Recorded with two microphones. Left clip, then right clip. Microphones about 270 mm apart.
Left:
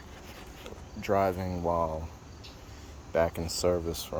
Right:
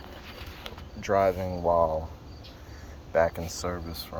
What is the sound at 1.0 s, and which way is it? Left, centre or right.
Speech, left.